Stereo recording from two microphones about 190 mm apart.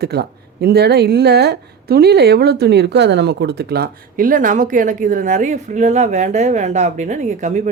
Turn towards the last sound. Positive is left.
turn(degrees=-40)  # may be behind; listen again after turning